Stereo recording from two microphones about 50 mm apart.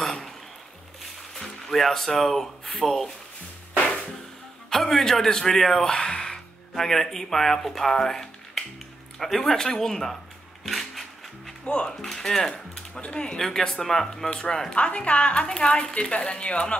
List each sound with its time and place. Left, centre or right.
0.0 s a sound: centre
1.4 s speech: centre
4.6 s speech: centre
10.6 s music: centre
11.6 s speech: centre
11.9 s a woman's voice: centre
13.4 s speech: centre
14.8 s a woman's voice: left